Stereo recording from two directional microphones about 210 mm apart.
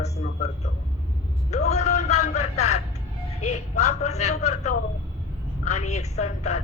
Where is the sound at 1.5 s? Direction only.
30° left (ahead or behind).